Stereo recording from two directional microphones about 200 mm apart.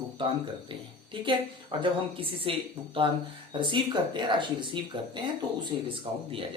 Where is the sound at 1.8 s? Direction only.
25° right (ahead or behind).